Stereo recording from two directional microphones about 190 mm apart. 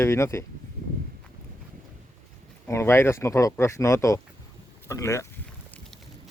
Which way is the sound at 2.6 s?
15° left (ahead or behind).